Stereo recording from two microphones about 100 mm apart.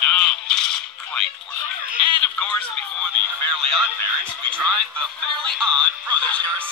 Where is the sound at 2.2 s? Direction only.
10° left (ahead or behind).